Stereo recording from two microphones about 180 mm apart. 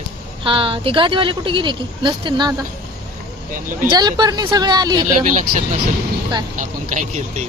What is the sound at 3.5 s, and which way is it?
Speech, 50° right (ahead or behind).